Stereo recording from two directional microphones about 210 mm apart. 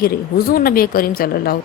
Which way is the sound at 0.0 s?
45° left (ahead or behind).